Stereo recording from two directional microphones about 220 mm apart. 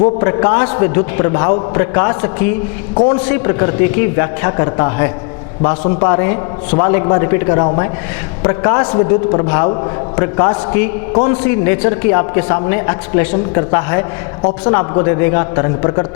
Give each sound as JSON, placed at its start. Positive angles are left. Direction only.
{"t": 0.0, "sound": "a man's voice", "side_deg": 20}
{"t": 11.4, "sound": "a man's voice", "side_deg": 15}